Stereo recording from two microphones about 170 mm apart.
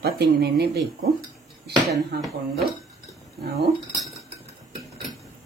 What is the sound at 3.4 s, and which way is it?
Speech, 70° right (ahead or behind).